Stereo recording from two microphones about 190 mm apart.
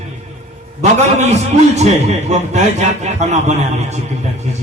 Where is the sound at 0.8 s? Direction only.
35° right (ahead or behind).